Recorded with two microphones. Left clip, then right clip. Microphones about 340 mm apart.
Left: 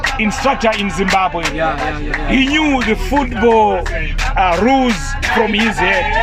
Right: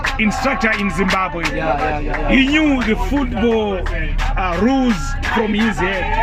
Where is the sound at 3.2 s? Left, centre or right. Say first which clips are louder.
Left 9 dB; left.